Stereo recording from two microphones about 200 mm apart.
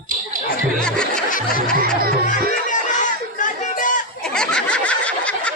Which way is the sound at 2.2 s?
40° left (ahead or behind).